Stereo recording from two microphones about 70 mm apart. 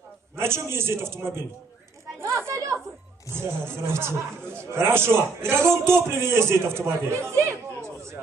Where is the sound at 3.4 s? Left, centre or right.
Right.